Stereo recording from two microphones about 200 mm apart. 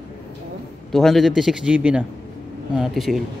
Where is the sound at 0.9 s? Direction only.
Centre (ahead or behind).